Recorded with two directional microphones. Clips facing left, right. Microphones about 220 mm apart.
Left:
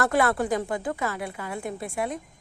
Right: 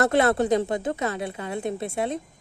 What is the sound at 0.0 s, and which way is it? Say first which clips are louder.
A woman's voice: right 3 dB; 25° right (ahead or behind).